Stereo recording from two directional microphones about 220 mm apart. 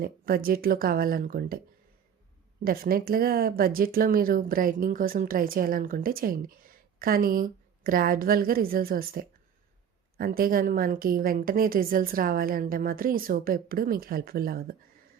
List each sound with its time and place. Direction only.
0.0 s speech: 40° right (ahead or behind)
2.6 s speech: 40° right (ahead or behind)